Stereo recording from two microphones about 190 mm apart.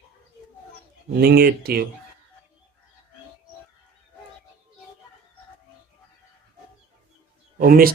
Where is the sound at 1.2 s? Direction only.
55° right (ahead or behind).